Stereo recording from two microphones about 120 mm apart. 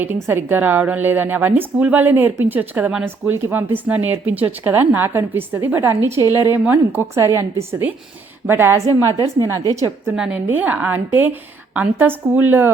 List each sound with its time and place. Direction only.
0.0 s a woman's voice: 20° right (ahead or behind)
6.1 s a woman's voice: 30° left (ahead or behind)
6.7 s a woman's voice: 20° right (ahead or behind)
10.2 s a woman's voice: 10° right (ahead or behind)